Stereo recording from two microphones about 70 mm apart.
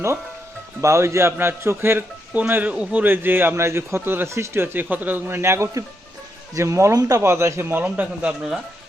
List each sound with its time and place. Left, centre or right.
0.8 s a man's voice: right
2.4 s a man's voice: right
5.3 s a man's voice: right
7.2 s a man's voice: right
8.3 s speech: centre